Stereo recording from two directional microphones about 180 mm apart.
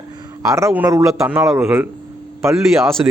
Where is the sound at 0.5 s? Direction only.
10° right (ahead or behind).